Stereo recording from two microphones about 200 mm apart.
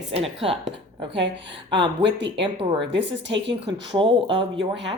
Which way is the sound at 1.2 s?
60° right (ahead or behind).